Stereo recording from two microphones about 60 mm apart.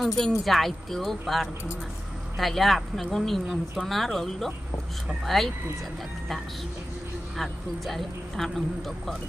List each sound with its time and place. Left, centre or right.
0.0 s speech: centre
7.3 s speech: centre